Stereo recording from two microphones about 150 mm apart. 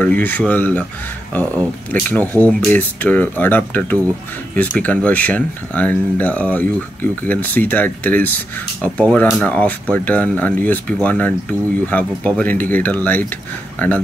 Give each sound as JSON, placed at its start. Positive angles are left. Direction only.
{"t": 0.0, "sound": "speech", "side_deg": 10}